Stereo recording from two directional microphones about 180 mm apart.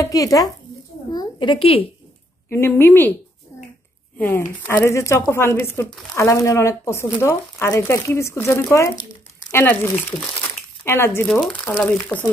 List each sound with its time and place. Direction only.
0.0 s a woman's voice: 20° left (ahead or behind)
2.5 s speech: 15° left (ahead or behind)
4.6 s speech: 15° left (ahead or behind)
11.2 s speech: centre (ahead or behind)